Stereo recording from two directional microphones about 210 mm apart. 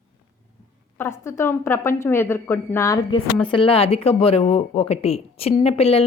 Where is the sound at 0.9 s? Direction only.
10° left (ahead or behind); by 6.0 s 30° left (ahead or behind).